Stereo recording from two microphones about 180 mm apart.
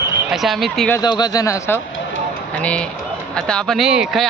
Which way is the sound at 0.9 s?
25° left (ahead or behind).